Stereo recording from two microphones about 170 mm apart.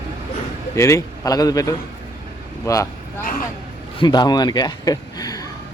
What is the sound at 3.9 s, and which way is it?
Speech, 25° left (ahead or behind).